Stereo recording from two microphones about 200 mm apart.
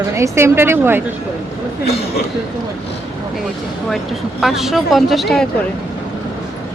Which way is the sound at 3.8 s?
Centre (ahead or behind).